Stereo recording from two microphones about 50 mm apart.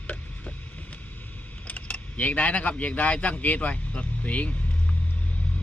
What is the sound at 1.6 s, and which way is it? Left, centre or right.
Speech, left.